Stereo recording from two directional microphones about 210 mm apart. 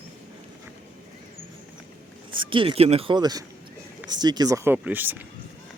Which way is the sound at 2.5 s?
25° right (ahead or behind).